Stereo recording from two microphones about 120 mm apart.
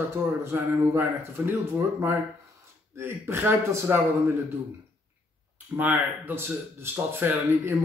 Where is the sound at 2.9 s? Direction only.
20° right (ahead or behind).